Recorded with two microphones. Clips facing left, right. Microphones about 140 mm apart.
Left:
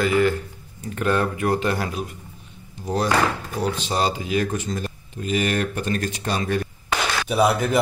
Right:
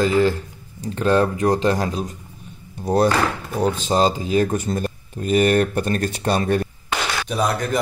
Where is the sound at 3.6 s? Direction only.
40° right (ahead or behind).